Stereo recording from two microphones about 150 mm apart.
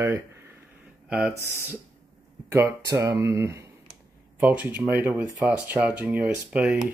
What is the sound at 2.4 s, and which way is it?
Speech, 20° right (ahead or behind).